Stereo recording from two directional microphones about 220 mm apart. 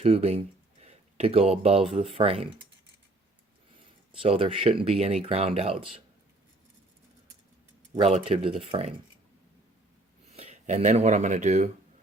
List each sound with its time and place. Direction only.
0.0 s speech: 30° right (ahead or behind)
4.2 s speech: 25° right (ahead or behind)
7.9 s speech: 25° right (ahead or behind)
10.3 s speech: 30° right (ahead or behind)